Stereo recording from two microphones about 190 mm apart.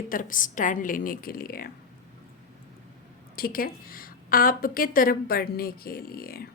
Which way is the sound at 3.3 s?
50° left (ahead or behind).